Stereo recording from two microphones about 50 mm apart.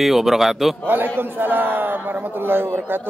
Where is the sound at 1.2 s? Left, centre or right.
Right.